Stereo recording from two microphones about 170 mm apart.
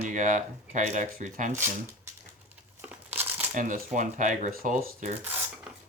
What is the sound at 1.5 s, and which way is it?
Speech, 15° right (ahead or behind).